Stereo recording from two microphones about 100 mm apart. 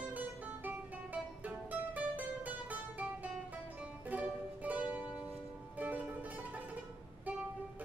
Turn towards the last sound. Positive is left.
turn(degrees=-15)  # may be behind; listen again after turning